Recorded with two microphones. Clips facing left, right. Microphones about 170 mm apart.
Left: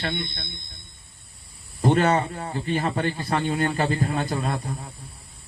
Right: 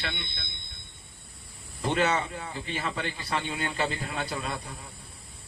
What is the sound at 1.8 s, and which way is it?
Speech, 45° left (ahead or behind).